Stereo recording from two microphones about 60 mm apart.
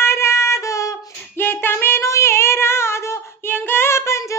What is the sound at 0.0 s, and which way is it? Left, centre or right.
Music, left.